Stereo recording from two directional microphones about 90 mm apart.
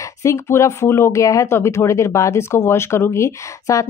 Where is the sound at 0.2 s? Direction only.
35° left (ahead or behind).